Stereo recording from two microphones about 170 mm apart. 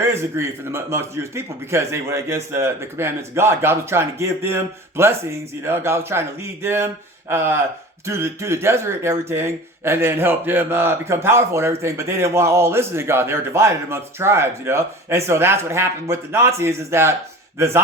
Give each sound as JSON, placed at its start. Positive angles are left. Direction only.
{"t": 0.0, "sound": "speech", "side_deg": -15}